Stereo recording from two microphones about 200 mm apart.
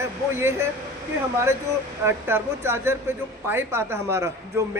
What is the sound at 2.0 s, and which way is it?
Speech, 10° right (ahead or behind).